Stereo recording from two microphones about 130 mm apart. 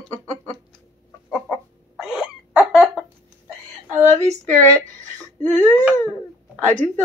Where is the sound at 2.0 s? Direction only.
5° right (ahead or behind).